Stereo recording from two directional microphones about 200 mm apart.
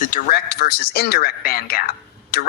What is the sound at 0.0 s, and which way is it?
Speech, 40° left (ahead or behind).